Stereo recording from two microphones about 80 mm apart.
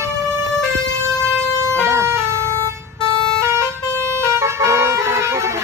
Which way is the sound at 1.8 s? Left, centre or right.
Right.